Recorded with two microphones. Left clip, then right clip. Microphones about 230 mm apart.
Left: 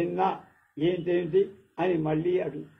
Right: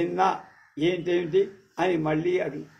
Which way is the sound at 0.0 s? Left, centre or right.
Right.